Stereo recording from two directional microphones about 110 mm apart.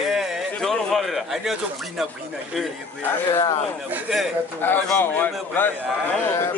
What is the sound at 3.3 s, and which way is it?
Speech, 25° left (ahead or behind).